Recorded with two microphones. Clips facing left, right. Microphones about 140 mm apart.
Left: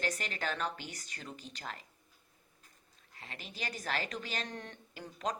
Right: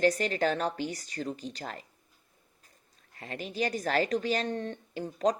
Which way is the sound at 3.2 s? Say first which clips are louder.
Right 12 dB; 40° right (ahead or behind).